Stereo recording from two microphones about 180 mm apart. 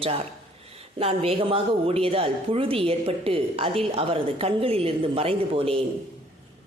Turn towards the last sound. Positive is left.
turn(degrees=-30)  # may be behind; listen again after turning